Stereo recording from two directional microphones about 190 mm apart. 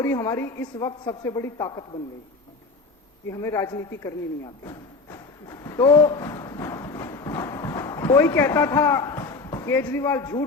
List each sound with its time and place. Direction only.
0.0 s a woman's voice: 15° left (ahead or behind)
3.2 s a woman's voice: 15° left (ahead or behind)
4.6 s a sound: 20° left (ahead or behind)